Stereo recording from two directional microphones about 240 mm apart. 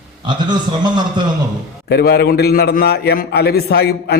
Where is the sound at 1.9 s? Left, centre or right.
Left.